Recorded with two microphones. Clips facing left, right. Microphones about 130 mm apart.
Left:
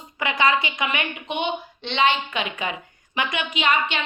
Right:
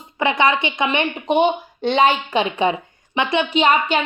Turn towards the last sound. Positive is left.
turn(degrees=-40)  # may be behind; listen again after turning